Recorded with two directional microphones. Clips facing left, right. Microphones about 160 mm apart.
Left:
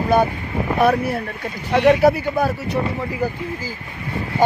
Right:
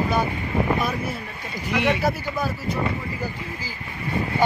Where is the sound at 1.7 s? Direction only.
35° left (ahead or behind).